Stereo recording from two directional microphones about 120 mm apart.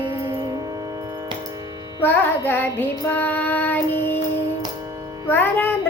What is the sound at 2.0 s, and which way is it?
Music, 15° left (ahead or behind).